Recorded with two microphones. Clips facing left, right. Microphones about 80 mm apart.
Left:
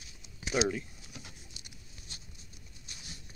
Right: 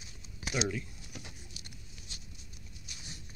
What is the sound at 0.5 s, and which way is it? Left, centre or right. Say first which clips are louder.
Speech: left 4 dB; centre.